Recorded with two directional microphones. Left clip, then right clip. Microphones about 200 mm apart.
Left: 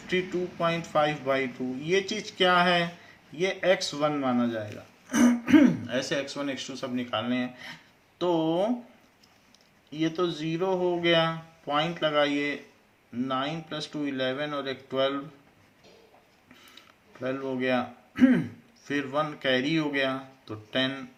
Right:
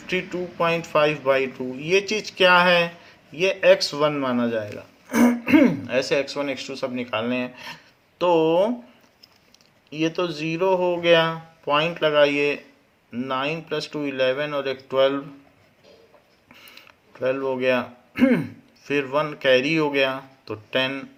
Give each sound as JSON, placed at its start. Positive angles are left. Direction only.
{"t": 0.6, "sound": "speech", "side_deg": -45}
{"t": 10.0, "sound": "speech", "side_deg": -50}
{"t": 17.2, "sound": "speech", "side_deg": -45}